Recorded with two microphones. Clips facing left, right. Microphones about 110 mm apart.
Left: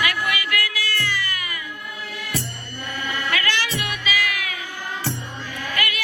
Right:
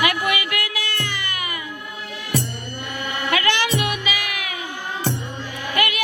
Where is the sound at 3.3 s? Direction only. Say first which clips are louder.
Right 6 dB; 20° right (ahead or behind).